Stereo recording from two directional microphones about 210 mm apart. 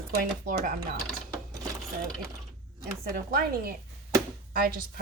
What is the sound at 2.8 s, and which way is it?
A woman's voice, 45° right (ahead or behind).